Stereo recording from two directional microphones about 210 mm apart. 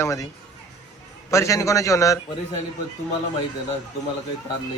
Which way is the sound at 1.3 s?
15° left (ahead or behind).